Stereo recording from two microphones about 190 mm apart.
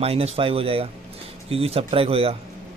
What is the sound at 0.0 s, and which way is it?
Speech, 30° right (ahead or behind).